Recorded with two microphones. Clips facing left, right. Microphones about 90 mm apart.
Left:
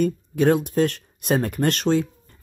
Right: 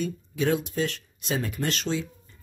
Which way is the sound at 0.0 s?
50° left (ahead or behind).